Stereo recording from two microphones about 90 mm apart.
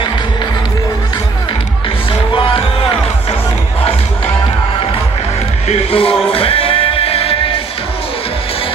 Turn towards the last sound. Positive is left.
turn(degrees=90)